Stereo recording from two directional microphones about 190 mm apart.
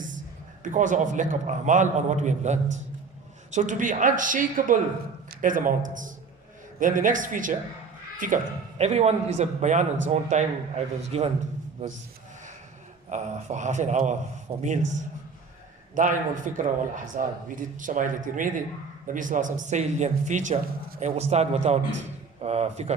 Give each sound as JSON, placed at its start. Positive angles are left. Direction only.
{"t": 0.6, "sound": "a man's voice", "side_deg": -40}
{"t": 13.1, "sound": "a man's voice", "side_deg": -40}
{"t": 16.0, "sound": "a man's voice", "side_deg": -45}